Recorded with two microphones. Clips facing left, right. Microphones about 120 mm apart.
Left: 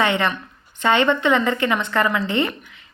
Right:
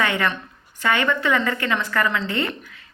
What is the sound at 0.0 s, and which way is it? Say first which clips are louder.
A woman's voice: left 2 dB; 20° left (ahead or behind).